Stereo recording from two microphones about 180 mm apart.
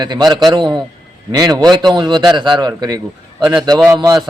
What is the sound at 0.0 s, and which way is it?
A man's voice, 25° right (ahead or behind).